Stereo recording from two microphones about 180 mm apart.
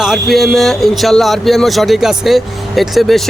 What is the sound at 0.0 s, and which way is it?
A man's voice, centre (ahead or behind).